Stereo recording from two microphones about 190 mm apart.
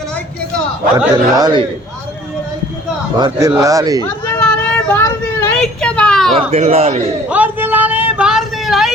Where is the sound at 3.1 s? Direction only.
20° right (ahead or behind).